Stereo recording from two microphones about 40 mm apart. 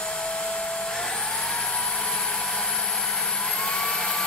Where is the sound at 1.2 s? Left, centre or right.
Left.